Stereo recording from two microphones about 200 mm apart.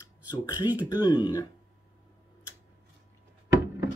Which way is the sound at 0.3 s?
20° left (ahead or behind).